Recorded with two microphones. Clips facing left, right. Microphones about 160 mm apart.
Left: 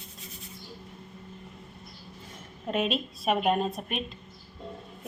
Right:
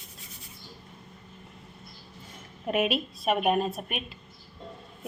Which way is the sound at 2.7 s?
5° right (ahead or behind).